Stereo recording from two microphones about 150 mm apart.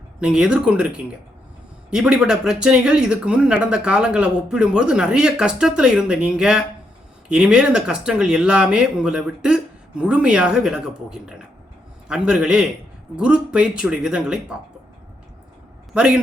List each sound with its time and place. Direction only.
0.2 s speech: 5° right (ahead or behind)
16.0 s speech: 5° right (ahead or behind)